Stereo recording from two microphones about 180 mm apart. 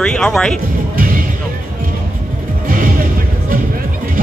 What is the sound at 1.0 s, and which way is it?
Music, 50° right (ahead or behind).